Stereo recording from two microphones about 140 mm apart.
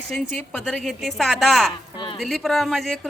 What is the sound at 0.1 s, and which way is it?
Speech, 5° left (ahead or behind).